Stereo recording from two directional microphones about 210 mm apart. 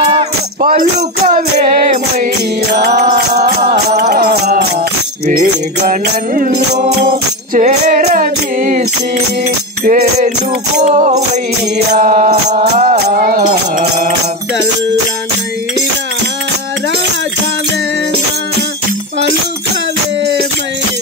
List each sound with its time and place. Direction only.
0.6 s music: 40° right (ahead or behind)
2.7 s music: 50° right (ahead or behind)
9.8 s music: 40° right (ahead or behind)